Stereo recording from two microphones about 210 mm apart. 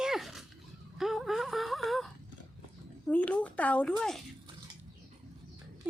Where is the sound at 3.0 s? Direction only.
5° left (ahead or behind).